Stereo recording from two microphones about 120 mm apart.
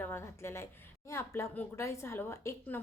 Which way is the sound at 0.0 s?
20° left (ahead or behind).